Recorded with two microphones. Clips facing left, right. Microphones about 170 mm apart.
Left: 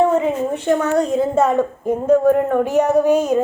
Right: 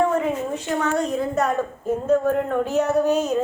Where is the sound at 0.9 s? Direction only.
25° left (ahead or behind).